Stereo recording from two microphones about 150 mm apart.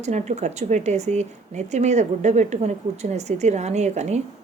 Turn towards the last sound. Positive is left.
turn(degrees=-50)  # may be behind; listen again after turning